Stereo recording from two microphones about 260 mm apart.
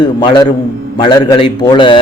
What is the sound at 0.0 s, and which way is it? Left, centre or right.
A man's voice, centre.